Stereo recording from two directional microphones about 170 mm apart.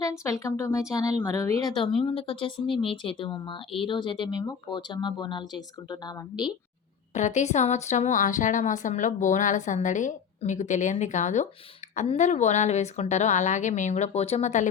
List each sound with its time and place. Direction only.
0.0 s a woman's voice: 15° left (ahead or behind)
7.1 s speech: 45° left (ahead or behind)